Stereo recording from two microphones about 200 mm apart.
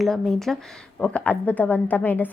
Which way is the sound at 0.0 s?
Centre (ahead or behind).